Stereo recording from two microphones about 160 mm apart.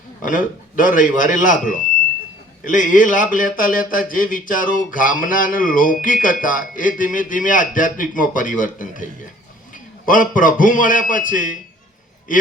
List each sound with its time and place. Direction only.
0.3 s a man's voice: 55° left (ahead or behind)
10.1 s a man's voice: 55° left (ahead or behind)